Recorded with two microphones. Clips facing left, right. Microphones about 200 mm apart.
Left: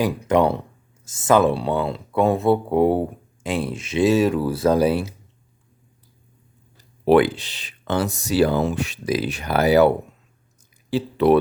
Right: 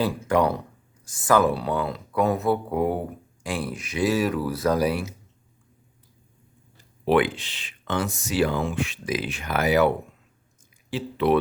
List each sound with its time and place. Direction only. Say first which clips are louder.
0.0 s speech: left 3 dB; 20° left (ahead or behind)
7.0 s speech: left 5 dB; 40° left (ahead or behind)
10.9 s speech: left 5 dB; 40° left (ahead or behind)